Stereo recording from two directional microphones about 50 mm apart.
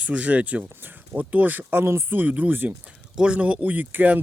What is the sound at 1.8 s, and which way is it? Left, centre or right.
Speech, right.